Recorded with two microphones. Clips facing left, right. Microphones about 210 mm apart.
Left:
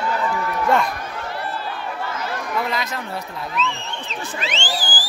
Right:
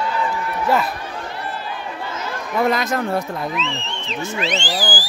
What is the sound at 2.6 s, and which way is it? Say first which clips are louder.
Speech: right 7 dB; 45° right (ahead or behind).